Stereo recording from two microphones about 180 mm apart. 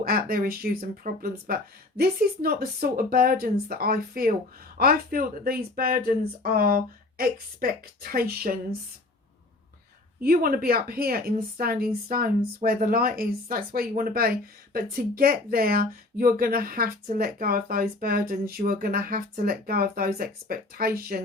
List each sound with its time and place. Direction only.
0.0 s a woman's voice: 55° right (ahead or behind)
10.2 s a woman's voice: 55° right (ahead or behind)